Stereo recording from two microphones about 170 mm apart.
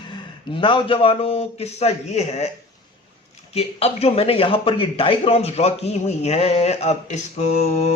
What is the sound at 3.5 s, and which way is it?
A man's voice, 35° left (ahead or behind).